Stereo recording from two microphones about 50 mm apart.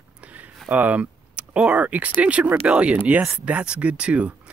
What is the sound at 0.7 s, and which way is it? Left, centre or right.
Speech, right.